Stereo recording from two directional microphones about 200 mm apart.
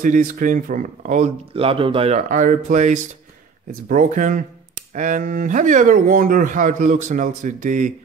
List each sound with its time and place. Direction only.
0.0 s speech: 40° right (ahead or behind)
2.1 s speech: 40° right (ahead or behind)